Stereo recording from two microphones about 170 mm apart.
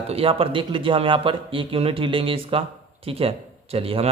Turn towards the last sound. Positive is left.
turn(degrees=-35)  # may be behind; listen again after turning